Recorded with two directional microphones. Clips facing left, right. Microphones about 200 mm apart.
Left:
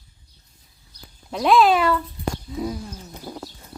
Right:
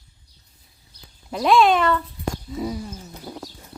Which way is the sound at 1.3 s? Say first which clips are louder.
Even; centre (ahead or behind).